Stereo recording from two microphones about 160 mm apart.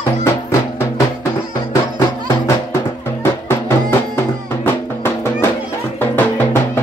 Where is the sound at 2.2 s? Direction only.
15° left (ahead or behind).